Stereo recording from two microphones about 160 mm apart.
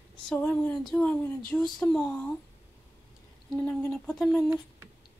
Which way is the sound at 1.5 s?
5° left (ahead or behind).